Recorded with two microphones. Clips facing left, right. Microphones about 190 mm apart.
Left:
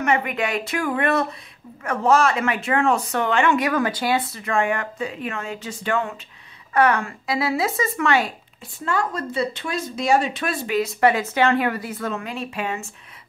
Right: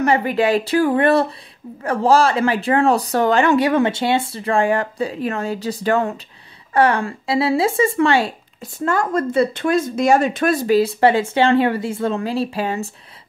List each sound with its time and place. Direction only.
0.0 s speech: 35° right (ahead or behind)
8.8 s speech: 45° right (ahead or behind)